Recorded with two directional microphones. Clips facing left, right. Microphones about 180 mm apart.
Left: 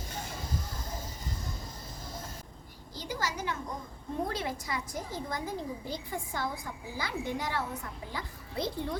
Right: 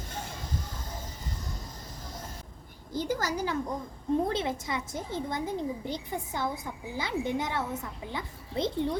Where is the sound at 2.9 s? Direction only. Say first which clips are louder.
Right 6 dB; 50° right (ahead or behind).